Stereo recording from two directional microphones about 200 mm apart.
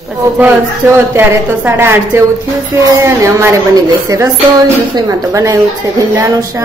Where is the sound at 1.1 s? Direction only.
10° right (ahead or behind).